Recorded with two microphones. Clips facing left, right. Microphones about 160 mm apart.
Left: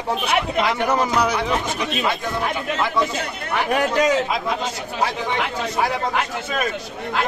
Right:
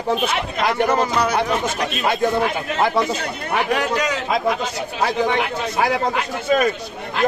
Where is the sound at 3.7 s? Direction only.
50° left (ahead or behind).